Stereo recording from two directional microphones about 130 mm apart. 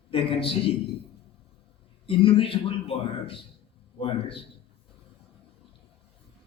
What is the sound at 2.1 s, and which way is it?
A man's voice, 45° left (ahead or behind).